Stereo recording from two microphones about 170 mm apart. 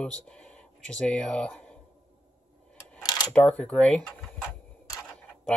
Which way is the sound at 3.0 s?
25° left (ahead or behind).